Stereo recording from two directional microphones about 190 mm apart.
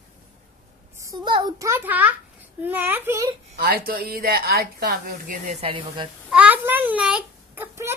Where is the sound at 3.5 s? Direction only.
50° right (ahead or behind); by 6.1 s 30° right (ahead or behind).